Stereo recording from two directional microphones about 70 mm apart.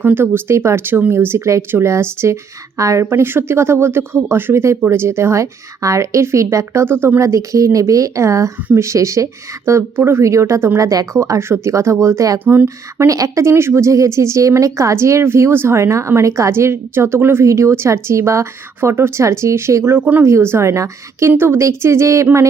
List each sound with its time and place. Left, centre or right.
0.0 s speech: right
6.8 s speech: right